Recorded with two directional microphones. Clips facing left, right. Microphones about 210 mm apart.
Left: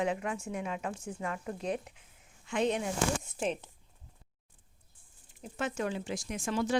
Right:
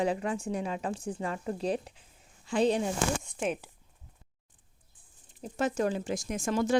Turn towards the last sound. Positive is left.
turn(degrees=-45)  # may be behind; listen again after turning